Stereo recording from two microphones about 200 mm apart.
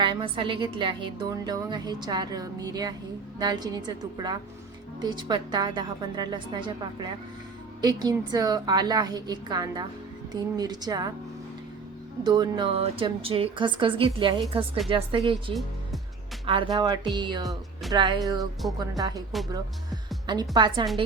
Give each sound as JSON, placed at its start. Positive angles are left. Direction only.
{"t": 0.0, "sound": "a woman's voice", "side_deg": -25}
{"t": 12.2, "sound": "a woman's voice", "side_deg": -20}
{"t": 20.2, "sound": "a woman's voice", "side_deg": -20}